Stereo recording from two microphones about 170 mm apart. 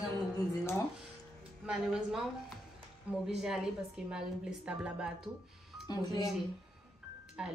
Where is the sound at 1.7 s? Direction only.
5° right (ahead or behind).